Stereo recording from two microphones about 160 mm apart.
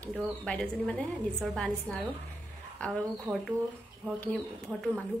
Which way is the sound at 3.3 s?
25° right (ahead or behind).